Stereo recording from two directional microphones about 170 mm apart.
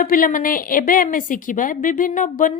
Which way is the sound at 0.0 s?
55° left (ahead or behind).